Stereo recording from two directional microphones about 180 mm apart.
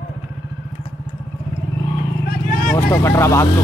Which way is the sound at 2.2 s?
55° left (ahead or behind).